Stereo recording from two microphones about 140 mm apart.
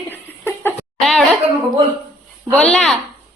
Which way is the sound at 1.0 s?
Centre (ahead or behind).